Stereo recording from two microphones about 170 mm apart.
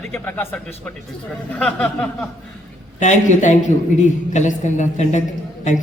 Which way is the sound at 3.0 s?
45° left (ahead or behind).